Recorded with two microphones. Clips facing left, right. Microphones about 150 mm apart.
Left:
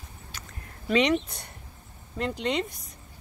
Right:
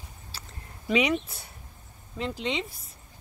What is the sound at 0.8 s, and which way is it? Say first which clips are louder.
A woman's voice: left 2 dB; 10° right (ahead or behind).